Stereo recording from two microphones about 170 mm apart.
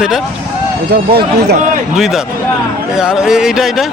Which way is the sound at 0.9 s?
70° right (ahead or behind).